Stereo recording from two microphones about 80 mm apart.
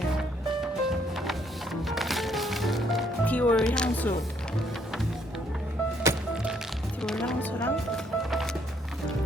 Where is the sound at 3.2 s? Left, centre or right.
Centre.